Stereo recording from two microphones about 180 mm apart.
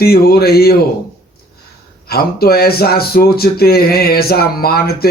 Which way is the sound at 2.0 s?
60° left (ahead or behind).